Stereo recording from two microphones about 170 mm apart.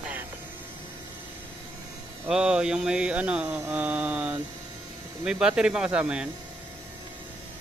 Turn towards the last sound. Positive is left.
turn(degrees=-5)  # may be behind; listen again after turning